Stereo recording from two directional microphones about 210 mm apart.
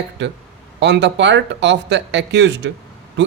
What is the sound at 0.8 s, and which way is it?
Speech, 55° right (ahead or behind).